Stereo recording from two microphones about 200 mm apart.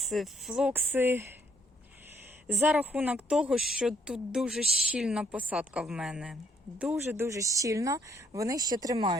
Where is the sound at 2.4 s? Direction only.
Centre (ahead or behind).